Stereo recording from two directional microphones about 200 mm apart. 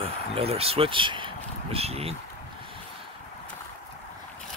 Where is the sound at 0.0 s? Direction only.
30° right (ahead or behind).